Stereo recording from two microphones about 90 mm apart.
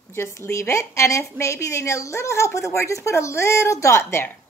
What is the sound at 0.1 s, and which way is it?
A woman's voice, 30° left (ahead or behind).